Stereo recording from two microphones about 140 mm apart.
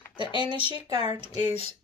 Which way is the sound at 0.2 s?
35° right (ahead or behind).